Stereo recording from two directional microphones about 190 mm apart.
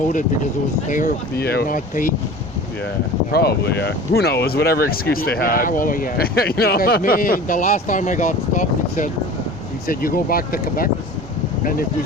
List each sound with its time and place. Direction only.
0.9 s speech: 45° left (ahead or behind)
3.3 s speech: 60° left (ahead or behind)